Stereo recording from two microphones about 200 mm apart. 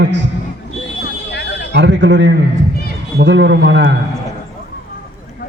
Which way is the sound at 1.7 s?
60° right (ahead or behind).